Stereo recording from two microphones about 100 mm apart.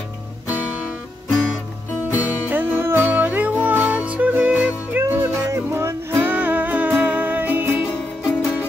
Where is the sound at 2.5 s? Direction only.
20° right (ahead or behind).